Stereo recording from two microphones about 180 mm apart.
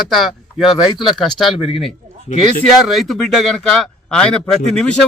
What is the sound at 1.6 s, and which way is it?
Speech, 30° left (ahead or behind).